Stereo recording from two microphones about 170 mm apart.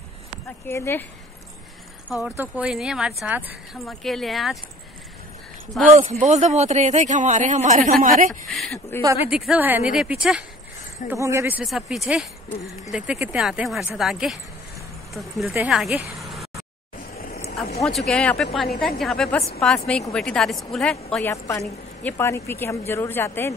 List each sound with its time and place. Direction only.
0.7 s a woman's voice: 15° left (ahead or behind)
2.0 s a woman's voice: 10° right (ahead or behind)
5.9 s speech: 45° right (ahead or behind)
8.5 s a woman's voice: centre (ahead or behind); by 11.6 s 15° right (ahead or behind)
11.6 s a woman's voice: centre (ahead or behind)
16.2 s vehicle: centre (ahead or behind)
17.1 s a sound: 65° left (ahead or behind)
17.8 s a woman's voice: 5° left (ahead or behind)
21.3 s a woman's voice: 15° left (ahead or behind)